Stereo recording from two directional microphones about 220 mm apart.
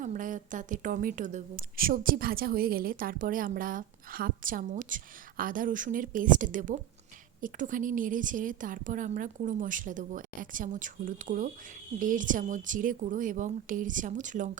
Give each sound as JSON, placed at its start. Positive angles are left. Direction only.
{"t": 0.0, "sound": "speech", "side_deg": -35}